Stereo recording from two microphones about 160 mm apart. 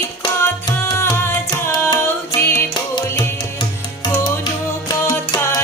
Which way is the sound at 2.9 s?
30° left (ahead or behind).